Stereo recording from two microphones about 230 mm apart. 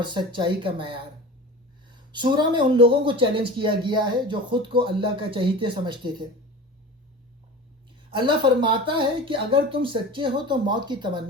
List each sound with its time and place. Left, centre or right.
0.0 s speech: centre
8.1 s speech: right